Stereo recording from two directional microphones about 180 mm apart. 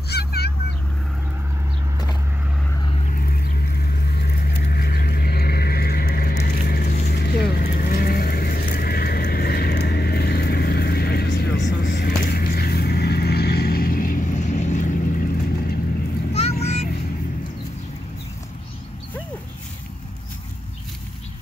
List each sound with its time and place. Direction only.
0.1 s vehicle: 60° left (ahead or behind)
3.1 s vehicle: 50° left (ahead or behind); by 12.0 s 70° left (ahead or behind)
12.0 s vehicle: 55° left (ahead or behind)
16.3 s vehicle: 35° left (ahead or behind)